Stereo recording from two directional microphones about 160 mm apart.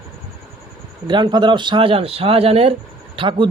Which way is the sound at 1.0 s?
30° right (ahead or behind).